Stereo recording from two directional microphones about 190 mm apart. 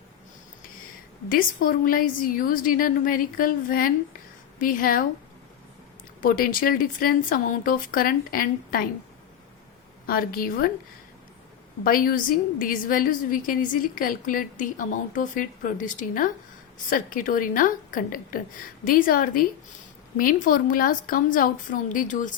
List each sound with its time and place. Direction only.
1.3 s a woman's voice: 50° left (ahead or behind)
6.2 s a woman's voice: 50° left (ahead or behind)
10.1 s a woman's voice: 50° left (ahead or behind)
11.8 s a woman's voice: 50° left (ahead or behind)